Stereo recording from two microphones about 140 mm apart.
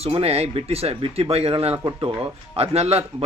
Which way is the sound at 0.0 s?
45° right (ahead or behind).